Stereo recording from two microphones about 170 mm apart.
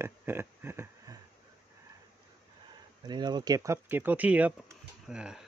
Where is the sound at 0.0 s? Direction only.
15° right (ahead or behind).